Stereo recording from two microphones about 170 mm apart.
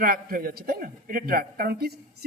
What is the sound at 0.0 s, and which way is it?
A man's voice, 60° right (ahead or behind).